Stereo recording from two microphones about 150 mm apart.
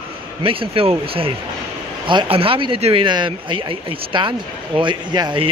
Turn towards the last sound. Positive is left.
turn(degrees=-30)  # may be behind; listen again after turning